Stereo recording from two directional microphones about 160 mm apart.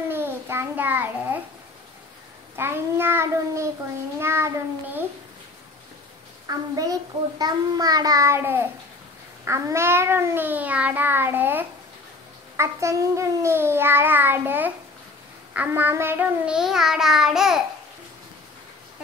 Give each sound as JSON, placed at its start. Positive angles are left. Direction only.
{"t": 0.1, "sound": "babbling", "side_deg": -15}
{"t": 2.5, "sound": "child singing", "side_deg": -15}
{"t": 6.4, "sound": "a child's voice", "side_deg": -20}
{"t": 9.4, "sound": "child singing", "side_deg": -15}